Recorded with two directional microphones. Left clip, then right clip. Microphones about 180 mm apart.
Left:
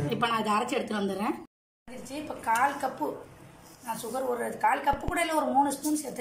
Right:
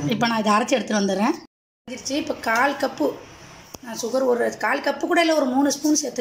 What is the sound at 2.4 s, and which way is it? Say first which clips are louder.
Speech: right 5 dB; 50° right (ahead or behind).